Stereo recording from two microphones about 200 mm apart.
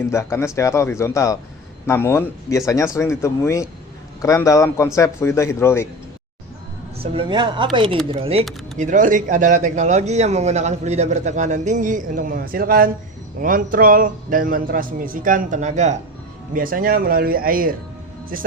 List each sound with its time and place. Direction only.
0.1 s speech: 15° left (ahead or behind)
7.0 s speech: 25° right (ahead or behind); by 17.7 s 45° right (ahead or behind)